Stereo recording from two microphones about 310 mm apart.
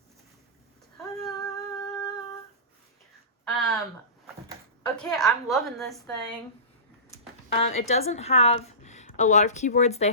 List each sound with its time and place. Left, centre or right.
1.3 s humming: centre
3.4 s a sound: centre
4.9 s a woman's voice: centre
7.1 s speech: centre